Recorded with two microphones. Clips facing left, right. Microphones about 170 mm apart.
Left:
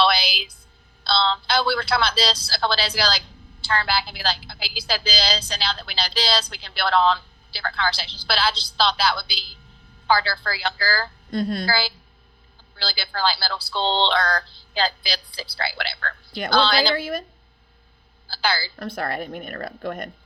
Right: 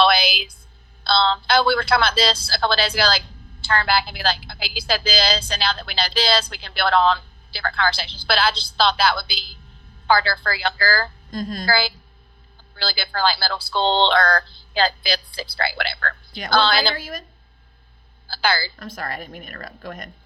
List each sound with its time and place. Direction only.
0.0 s a sound: 55° right (ahead or behind)
1.0 s speech: 55° right (ahead or behind)
11.3 s speech: 65° left (ahead or behind)
11.6 s speech: 55° right (ahead or behind)
17.0 s speech: 60° left (ahead or behind)
18.3 s speech: 55° right (ahead or behind)
18.8 s speech: 60° left (ahead or behind)